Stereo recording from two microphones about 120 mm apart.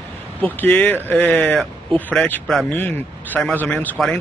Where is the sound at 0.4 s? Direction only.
15° left (ahead or behind).